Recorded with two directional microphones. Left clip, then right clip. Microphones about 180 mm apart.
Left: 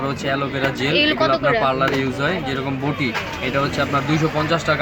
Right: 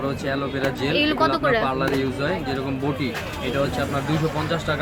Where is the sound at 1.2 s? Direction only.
15° right (ahead or behind).